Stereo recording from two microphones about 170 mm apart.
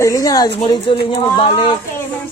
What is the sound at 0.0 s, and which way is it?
A woman's voice, 20° left (ahead or behind).